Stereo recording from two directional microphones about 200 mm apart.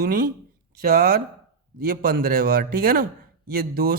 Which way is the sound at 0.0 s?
50° right (ahead or behind).